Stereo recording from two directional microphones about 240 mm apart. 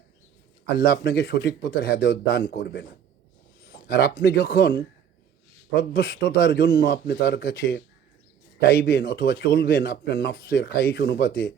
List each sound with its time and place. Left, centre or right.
0.8 s a man's voice: left